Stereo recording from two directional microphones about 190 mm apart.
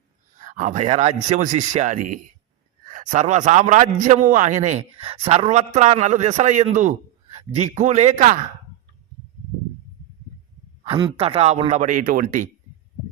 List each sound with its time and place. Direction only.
0.3 s a man's voice: 40° right (ahead or behind)
10.8 s a man's voice: 25° right (ahead or behind); by 12.5 s 45° right (ahead or behind)